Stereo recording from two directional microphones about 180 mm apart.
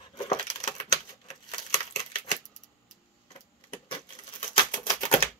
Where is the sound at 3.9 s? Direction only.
25° left (ahead or behind).